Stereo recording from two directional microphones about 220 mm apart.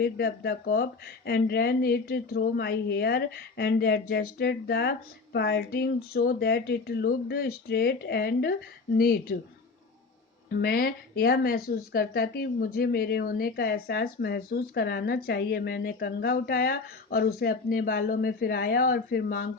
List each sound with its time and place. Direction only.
0.0 s speech: 45° left (ahead or behind)
10.5 s speech: 45° left (ahead or behind)